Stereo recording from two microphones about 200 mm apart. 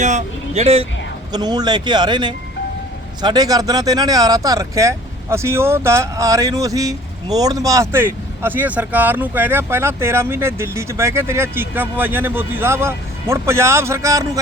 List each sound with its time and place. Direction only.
0.0 s speech: 35° right (ahead or behind)
1.3 s speech: 20° right (ahead or behind)